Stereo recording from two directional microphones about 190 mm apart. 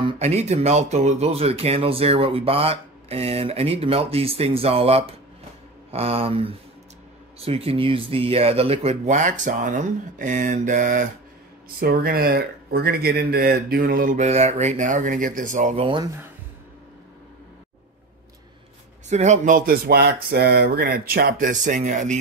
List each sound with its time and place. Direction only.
0.0 s speech: 35° right (ahead or behind)
19.0 s speech: 35° right (ahead or behind)